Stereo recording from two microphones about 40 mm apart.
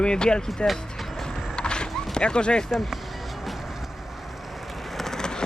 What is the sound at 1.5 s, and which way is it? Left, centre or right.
Horse, left.